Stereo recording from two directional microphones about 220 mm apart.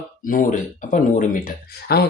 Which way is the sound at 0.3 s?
35° left (ahead or behind).